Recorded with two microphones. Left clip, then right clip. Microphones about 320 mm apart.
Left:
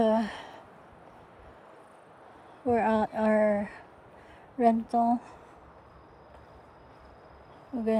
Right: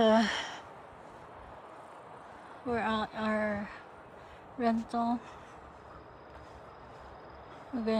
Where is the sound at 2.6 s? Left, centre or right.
Centre.